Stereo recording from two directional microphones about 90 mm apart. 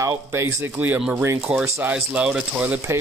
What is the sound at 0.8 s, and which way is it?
A man's voice, 15° right (ahead or behind).